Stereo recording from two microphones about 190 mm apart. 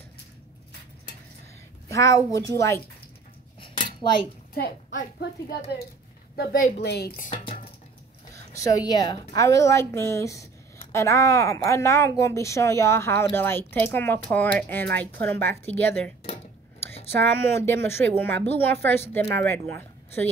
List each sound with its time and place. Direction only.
1.9 s a woman's voice: 15° left (ahead or behind)
3.6 s cutlery: 25° left (ahead or behind)
4.6 s a woman's voice: 55° left (ahead or behind)
8.5 s a woman's voice: 20° left (ahead or behind)
17.2 s a woman's voice: 10° left (ahead or behind)